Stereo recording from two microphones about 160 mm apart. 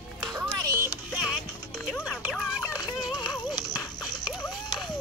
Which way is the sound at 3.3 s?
25° left (ahead or behind).